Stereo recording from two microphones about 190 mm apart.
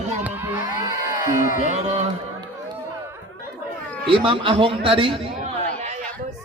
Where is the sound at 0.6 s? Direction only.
45° left (ahead or behind).